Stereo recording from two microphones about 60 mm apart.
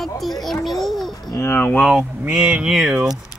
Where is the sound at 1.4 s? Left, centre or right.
Left.